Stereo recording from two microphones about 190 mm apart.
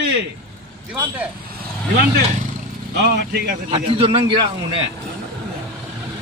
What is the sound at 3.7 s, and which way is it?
A man's voice, 30° right (ahead or behind).